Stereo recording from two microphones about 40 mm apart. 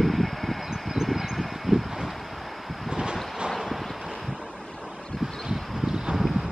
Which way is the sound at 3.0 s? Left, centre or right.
Right.